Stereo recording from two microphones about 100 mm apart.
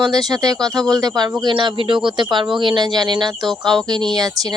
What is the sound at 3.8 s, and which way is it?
Speech, 45° right (ahead or behind).